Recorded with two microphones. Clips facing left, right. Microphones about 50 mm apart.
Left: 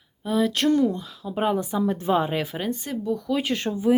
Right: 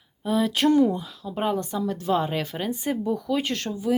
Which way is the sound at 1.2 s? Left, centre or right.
Centre.